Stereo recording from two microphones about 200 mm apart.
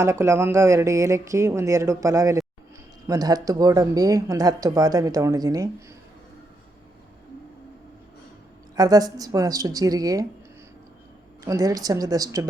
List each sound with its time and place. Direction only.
0.0 s speech: 15° right (ahead or behind)
8.7 s speech: 20° right (ahead or behind)
11.4 s speech: 20° right (ahead or behind)